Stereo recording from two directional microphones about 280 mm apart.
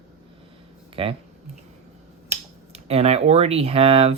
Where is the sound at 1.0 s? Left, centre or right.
Centre.